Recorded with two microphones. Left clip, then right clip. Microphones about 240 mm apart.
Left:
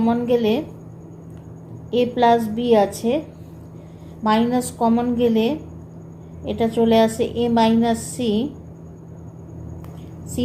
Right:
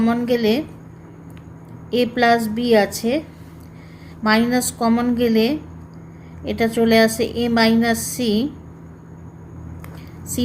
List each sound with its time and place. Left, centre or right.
0.0 s a woman's voice: right
1.9 s a woman's voice: right
4.2 s a woman's voice: right
10.4 s a woman's voice: right